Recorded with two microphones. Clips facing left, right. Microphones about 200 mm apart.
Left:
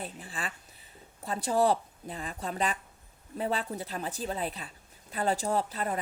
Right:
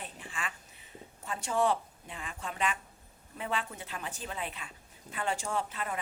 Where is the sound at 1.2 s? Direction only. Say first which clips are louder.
Left 4 dB; 35° left (ahead or behind).